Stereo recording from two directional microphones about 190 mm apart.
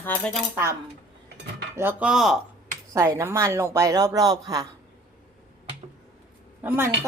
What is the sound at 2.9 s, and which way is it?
Speech, 15° right (ahead or behind).